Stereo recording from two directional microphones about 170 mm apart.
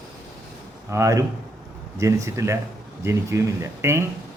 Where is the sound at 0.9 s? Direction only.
15° right (ahead or behind).